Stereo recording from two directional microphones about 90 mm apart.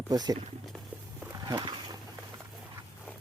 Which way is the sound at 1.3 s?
45° right (ahead or behind).